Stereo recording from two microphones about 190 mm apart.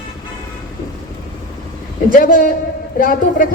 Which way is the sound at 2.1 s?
45° left (ahead or behind).